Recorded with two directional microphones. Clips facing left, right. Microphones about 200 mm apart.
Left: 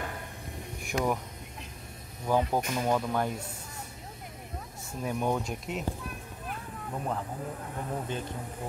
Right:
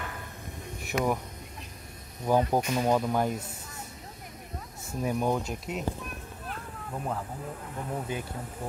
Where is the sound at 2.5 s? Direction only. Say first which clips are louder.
Right 3 dB; 15° right (ahead or behind).